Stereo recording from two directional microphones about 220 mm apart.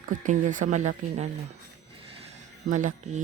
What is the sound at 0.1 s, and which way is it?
Speech, 35° right (ahead or behind).